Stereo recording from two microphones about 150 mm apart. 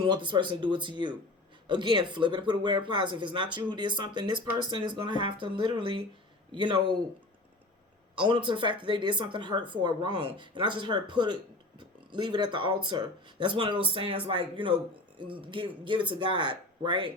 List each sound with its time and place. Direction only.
0.0 s speech: 35° right (ahead or behind)
8.2 s speech: 35° right (ahead or behind)